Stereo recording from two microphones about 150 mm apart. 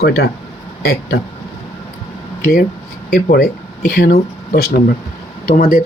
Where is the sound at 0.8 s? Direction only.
90° left.